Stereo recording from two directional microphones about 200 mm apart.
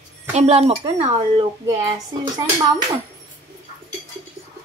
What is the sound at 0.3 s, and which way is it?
A woman's voice, 30° right (ahead or behind).